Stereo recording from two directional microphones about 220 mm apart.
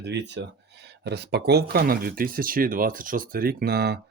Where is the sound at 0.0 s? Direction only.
50° right (ahead or behind).